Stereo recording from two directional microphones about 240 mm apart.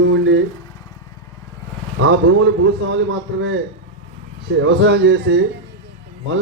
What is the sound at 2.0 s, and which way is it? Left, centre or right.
Speech, right.